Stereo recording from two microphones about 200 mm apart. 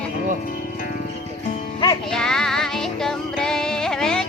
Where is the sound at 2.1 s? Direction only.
Centre (ahead or behind).